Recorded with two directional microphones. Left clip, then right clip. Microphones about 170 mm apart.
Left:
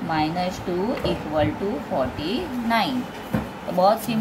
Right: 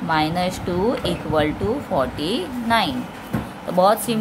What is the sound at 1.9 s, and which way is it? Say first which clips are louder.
Speech: right 3 dB; 45° right (ahead or behind).